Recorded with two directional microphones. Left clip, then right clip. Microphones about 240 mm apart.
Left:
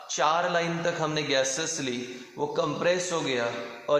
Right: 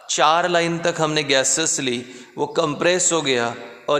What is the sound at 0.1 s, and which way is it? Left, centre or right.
A man's voice, right.